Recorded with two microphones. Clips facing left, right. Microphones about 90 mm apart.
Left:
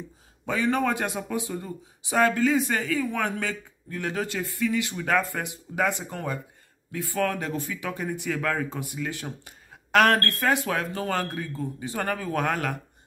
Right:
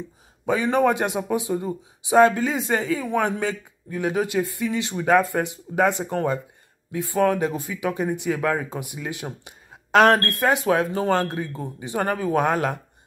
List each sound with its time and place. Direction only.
0.5 s speech: 20° right (ahead or behind)